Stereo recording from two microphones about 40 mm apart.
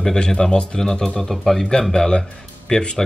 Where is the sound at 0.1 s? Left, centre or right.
Centre.